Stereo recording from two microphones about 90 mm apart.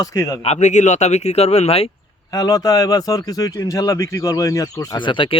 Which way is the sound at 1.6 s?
90° left.